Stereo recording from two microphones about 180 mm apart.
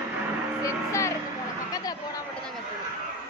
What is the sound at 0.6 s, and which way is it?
Speech, 15° left (ahead or behind).